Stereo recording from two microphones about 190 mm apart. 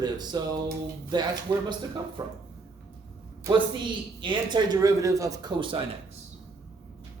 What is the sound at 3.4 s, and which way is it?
A man's voice, 25° right (ahead or behind).